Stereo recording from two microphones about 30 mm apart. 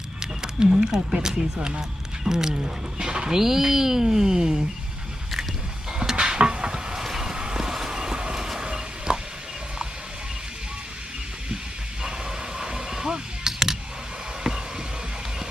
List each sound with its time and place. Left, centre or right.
0.2 s speech: right
1.5 s speech: right
2.2 s speech: centre
3.3 s speech: centre
6.1 s a sound: right
6.7 s stir: right
7.0 s vehicle: centre
8.4 s vehicle: centre
9.1 s a sound: right
12.0 s a sound: right